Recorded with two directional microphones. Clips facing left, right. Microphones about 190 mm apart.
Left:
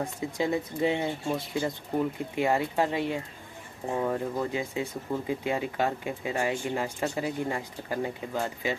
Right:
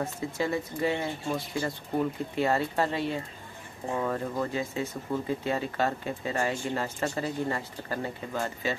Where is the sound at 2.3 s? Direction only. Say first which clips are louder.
Left 1 dB; 15° left (ahead or behind).